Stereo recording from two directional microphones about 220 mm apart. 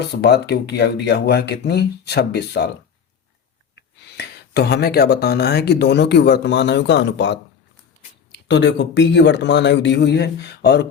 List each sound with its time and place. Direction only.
0.1 s speech: 50° left (ahead or behind)
3.8 s speech: 50° left (ahead or behind)